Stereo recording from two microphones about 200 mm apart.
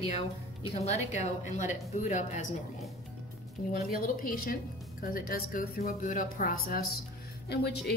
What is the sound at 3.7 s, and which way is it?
A woman's voice, 45° left (ahead or behind).